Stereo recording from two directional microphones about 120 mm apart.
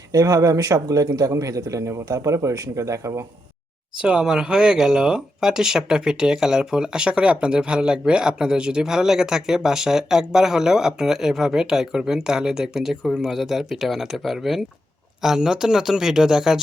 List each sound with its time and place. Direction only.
0.1 s a man's voice: 30° right (ahead or behind)
4.0 s speech: 5° right (ahead or behind)